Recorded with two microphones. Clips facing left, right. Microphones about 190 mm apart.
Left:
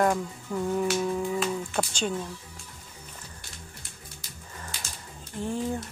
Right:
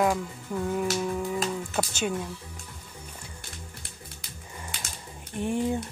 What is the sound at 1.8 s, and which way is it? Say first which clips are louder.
Speech: right 2 dB; 10° right (ahead or behind).